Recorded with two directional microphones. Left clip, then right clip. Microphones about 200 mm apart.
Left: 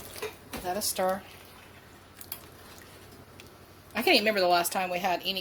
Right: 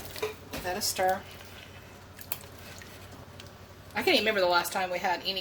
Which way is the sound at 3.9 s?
40° left (ahead or behind).